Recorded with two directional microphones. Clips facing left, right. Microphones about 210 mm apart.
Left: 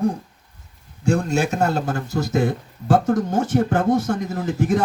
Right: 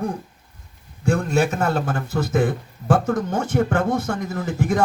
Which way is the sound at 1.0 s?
55° right (ahead or behind).